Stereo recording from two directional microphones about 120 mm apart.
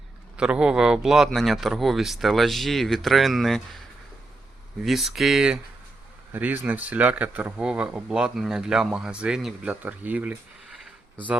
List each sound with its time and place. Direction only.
0.3 s speech: 10° right (ahead or behind)
4.8 s speech: centre (ahead or behind)
6.3 s speech: 15° right (ahead or behind)